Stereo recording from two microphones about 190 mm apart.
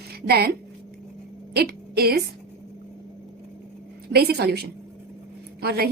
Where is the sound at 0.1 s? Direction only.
55° right (ahead or behind).